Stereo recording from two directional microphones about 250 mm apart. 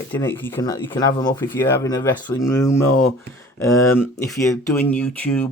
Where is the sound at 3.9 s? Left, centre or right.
Centre.